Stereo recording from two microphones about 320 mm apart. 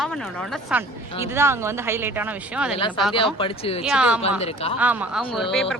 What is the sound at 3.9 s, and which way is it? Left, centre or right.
Speech, centre.